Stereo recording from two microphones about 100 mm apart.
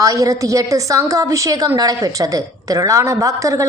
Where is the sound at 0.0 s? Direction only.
35° right (ahead or behind).